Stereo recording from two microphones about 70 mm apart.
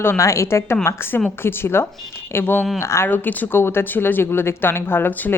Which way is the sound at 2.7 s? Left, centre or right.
Left.